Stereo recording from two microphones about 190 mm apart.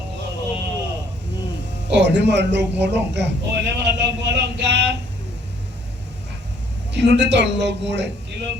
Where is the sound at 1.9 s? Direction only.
65° right (ahead or behind).